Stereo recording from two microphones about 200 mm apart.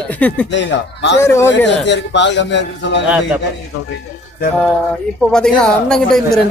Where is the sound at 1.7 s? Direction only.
60° left (ahead or behind).